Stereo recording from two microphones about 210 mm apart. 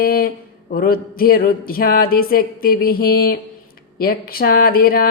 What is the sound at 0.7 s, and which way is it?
Speech, 45° left (ahead or behind).